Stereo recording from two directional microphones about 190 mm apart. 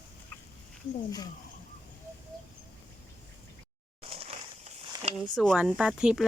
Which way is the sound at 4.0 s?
30° right (ahead or behind).